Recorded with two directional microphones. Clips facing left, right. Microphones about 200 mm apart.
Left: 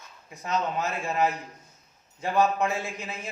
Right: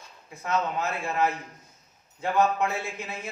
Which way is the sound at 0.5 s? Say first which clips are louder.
Even; 15° left (ahead or behind).